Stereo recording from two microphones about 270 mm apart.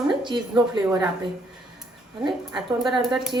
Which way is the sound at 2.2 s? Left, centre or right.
Centre.